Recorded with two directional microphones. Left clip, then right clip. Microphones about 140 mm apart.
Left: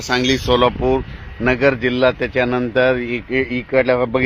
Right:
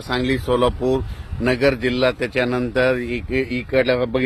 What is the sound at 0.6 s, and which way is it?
A man's voice, 20° left (ahead or behind).